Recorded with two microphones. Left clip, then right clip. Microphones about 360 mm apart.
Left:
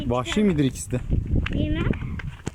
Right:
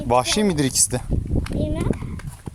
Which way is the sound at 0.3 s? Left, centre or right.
Right.